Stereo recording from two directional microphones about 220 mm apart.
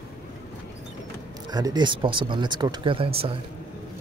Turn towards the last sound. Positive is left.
turn(degrees=-25)  # may be behind; listen again after turning